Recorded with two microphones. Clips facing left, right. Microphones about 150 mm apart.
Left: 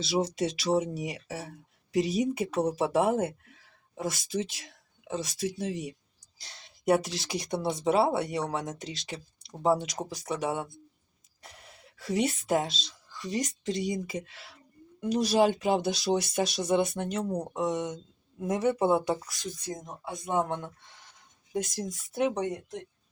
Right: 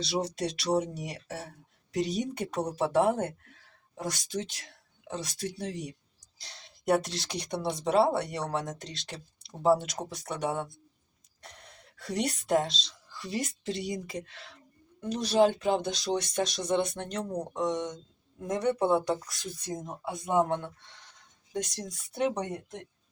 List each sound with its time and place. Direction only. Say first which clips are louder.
0.0 s speech: left 3 dB; centre (ahead or behind)
21.5 s speech: left 3 dB; 5° left (ahead or behind)